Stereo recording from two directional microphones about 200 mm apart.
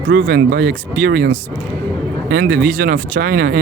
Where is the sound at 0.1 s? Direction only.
50° right (ahead or behind).